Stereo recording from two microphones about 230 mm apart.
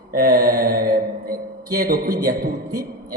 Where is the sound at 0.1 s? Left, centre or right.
Right.